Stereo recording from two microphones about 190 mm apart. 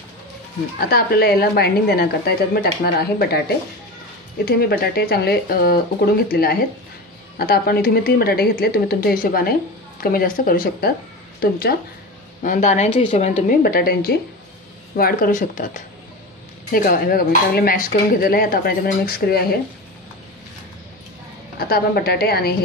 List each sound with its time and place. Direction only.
0.7 s a woman's voice: 55° left (ahead or behind)
4.5 s a woman's voice: 55° left (ahead or behind)
12.4 s speech: 40° left (ahead or behind)
16.7 s speech: 50° left (ahead or behind)
21.5 s a woman's voice: 55° left (ahead or behind)